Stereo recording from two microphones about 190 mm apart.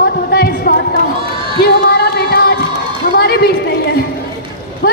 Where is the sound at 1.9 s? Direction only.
60° left (ahead or behind).